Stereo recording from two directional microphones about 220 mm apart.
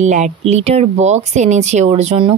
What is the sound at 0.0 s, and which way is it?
Speech, 30° right (ahead or behind).